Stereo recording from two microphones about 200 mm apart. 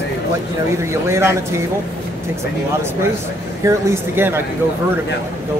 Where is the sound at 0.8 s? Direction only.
15° right (ahead or behind).